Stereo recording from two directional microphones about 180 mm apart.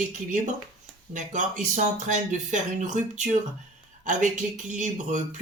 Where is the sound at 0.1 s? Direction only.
45° right (ahead or behind).